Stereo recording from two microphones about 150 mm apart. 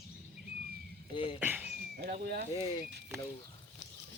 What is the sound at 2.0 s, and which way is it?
Speech, 90° right.